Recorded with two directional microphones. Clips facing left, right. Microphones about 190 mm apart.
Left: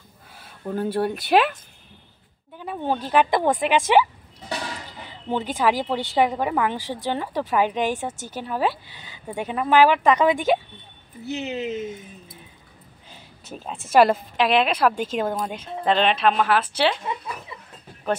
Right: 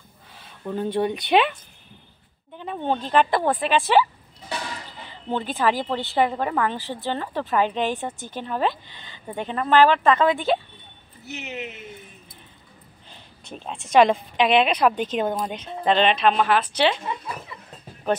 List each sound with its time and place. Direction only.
0.4 s speech: 5° left (ahead or behind)
11.2 s speech: 30° left (ahead or behind)
13.1 s a woman's voice: 5° left (ahead or behind)